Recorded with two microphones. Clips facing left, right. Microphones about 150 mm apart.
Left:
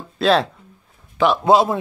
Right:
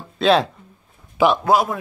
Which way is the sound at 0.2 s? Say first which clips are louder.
Even; centre (ahead or behind).